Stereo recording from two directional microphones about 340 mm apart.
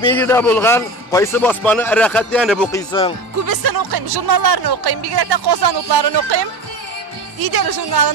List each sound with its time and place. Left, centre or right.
0.0 s a man's voice: centre
3.4 s speech: right
7.3 s speech: right